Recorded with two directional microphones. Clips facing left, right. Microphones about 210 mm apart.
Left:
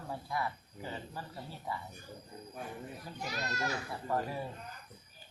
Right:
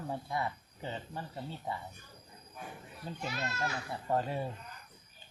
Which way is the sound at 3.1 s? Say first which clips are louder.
Right 3 dB; 25° right (ahead or behind).